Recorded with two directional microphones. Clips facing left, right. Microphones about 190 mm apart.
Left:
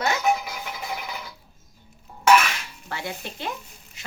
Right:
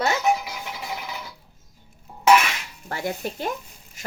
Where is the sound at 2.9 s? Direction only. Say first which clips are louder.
Right 5 dB; 45° right (ahead or behind).